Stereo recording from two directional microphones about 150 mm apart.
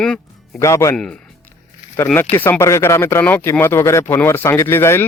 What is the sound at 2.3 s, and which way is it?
Speech, 15° left (ahead or behind).